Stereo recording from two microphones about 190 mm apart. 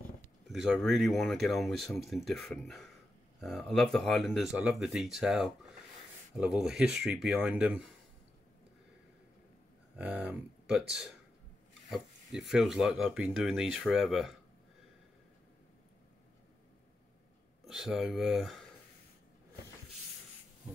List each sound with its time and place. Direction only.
0.5 s speech: centre (ahead or behind)
9.9 s speech: 5° right (ahead or behind)
17.6 s speech: 5° right (ahead or behind)